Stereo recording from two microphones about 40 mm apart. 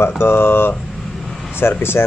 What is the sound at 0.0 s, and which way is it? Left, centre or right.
Speech, left.